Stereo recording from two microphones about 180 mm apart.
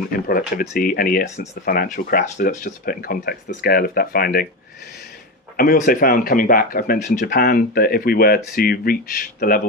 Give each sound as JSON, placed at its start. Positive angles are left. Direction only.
{"t": 0.1, "sound": "speech", "side_deg": 55}
{"t": 5.6, "sound": "speech", "side_deg": 55}